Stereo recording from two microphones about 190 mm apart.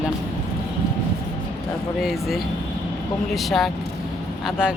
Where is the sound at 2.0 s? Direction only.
Centre (ahead or behind).